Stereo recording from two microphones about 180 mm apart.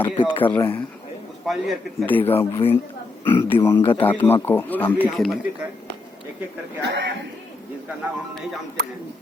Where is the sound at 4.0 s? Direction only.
10° left (ahead or behind).